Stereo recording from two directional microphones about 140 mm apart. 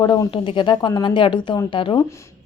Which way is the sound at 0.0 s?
30° left (ahead or behind).